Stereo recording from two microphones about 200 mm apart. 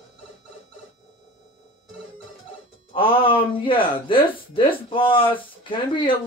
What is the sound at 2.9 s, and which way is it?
Speech, 25° left (ahead or behind).